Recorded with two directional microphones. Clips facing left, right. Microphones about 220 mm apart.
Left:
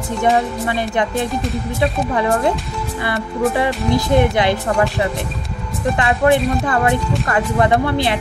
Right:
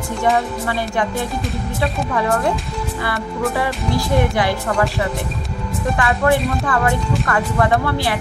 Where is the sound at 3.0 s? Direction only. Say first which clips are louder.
Left 4 dB; 20° left (ahead or behind).